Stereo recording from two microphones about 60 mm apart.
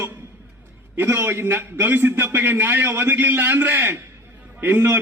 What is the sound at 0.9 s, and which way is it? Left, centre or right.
A man's voice, right.